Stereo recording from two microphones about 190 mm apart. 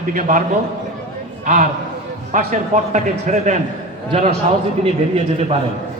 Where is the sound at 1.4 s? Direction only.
40° right (ahead or behind).